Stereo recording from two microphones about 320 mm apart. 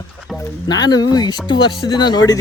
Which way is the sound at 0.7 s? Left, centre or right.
Centre.